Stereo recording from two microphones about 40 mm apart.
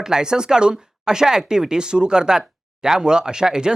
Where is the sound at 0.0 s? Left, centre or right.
Centre.